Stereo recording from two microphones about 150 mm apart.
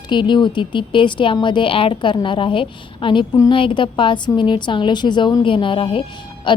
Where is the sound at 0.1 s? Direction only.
30° left (ahead or behind).